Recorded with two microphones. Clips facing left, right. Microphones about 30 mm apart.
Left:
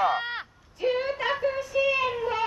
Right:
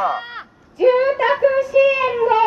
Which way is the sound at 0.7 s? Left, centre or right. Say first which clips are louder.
Right 12 dB; centre.